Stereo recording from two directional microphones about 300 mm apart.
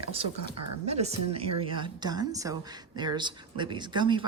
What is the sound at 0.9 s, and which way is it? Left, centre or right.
A woman's voice, right.